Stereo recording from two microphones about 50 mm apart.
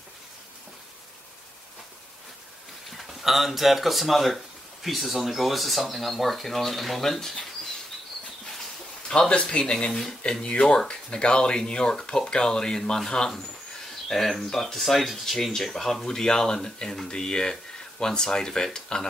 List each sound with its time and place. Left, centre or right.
3.0 s speech: centre
9.3 s speech: left